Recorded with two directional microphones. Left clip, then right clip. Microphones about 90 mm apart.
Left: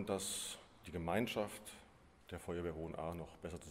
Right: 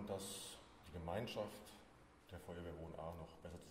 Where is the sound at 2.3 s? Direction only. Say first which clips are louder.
Left 9 dB; 40° left (ahead or behind).